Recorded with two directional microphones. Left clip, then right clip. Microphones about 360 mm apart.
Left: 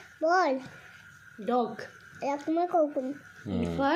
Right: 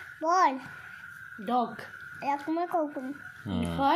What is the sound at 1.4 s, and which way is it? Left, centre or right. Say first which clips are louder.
Speech: even; centre.